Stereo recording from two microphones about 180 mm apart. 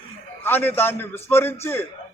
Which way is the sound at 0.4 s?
10° left (ahead or behind).